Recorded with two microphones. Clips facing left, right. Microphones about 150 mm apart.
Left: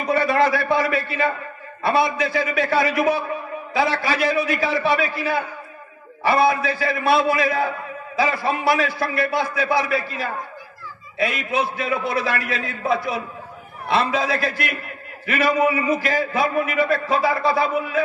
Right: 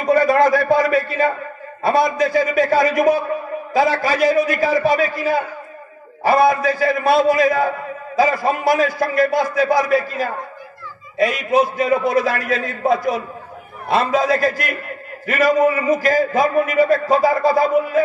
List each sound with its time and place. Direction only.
0.0 s a man's voice: 40° right (ahead or behind)